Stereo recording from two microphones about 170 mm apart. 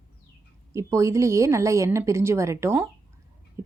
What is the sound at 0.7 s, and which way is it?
A woman's voice, 15° right (ahead or behind).